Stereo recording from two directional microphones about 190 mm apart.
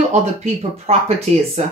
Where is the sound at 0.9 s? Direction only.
30° right (ahead or behind).